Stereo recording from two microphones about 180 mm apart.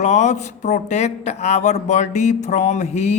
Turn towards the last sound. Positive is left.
turn(degrees=40)  # may be behind; listen again after turning